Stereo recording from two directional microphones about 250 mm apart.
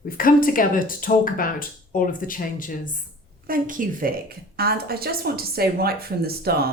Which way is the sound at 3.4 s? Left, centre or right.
Right.